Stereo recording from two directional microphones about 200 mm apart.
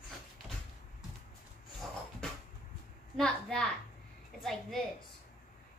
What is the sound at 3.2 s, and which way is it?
A woman's voice, 5° left (ahead or behind).